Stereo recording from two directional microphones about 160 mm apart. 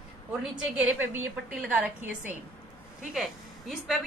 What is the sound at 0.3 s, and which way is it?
A woman's voice, 5° right (ahead or behind).